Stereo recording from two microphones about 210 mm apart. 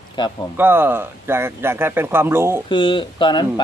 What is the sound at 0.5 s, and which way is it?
Speech, 10° right (ahead or behind).